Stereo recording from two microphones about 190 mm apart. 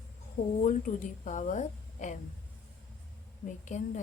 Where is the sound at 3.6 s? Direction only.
40° left (ahead or behind).